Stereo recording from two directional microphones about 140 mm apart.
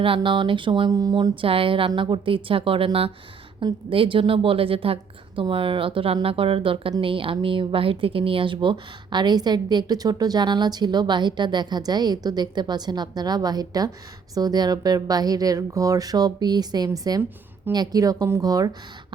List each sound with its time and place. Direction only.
0.0 s a woman's voice: 40° right (ahead or behind)